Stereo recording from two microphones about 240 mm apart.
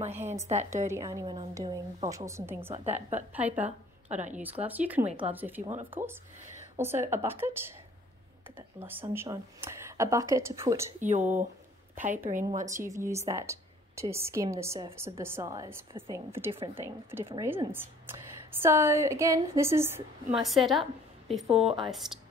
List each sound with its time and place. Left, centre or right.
0.1 s a woman's voice: centre
2.7 s a woman's voice: right
3.3 s a woman's voice: centre
3.6 s a woman's voice: right
4.4 s a woman's voice: centre
5.0 s a woman's voice: right
5.3 s a woman's voice: centre
6.8 s a woman's voice: centre
8.5 s a woman's voice: centre
11.0 s a woman's voice: right
12.6 s a woman's voice: centre